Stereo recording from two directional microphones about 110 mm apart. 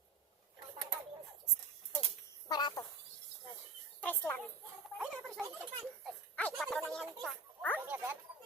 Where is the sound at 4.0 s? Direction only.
15° left (ahead or behind).